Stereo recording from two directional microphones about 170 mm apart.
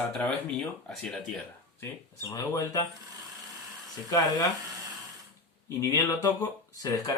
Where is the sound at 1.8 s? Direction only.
15° left (ahead or behind).